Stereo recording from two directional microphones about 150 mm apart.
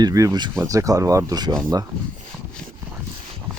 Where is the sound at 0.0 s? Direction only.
25° right (ahead or behind).